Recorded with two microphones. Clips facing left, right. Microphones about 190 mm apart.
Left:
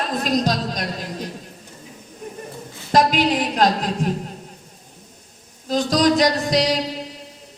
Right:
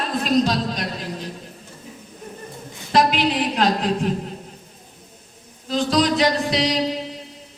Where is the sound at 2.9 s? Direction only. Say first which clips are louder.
Left 1 dB; 40° left (ahead or behind).